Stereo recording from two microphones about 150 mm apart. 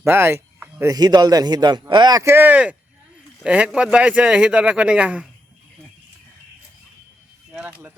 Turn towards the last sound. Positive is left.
turn(degrees=-10)  # may be behind; listen again after turning